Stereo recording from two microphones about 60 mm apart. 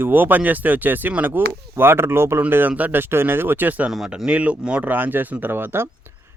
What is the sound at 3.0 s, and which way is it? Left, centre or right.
Speech, right.